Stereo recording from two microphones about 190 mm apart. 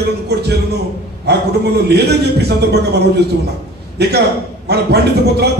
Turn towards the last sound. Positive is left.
turn(degrees=-60)  # may be behind; listen again after turning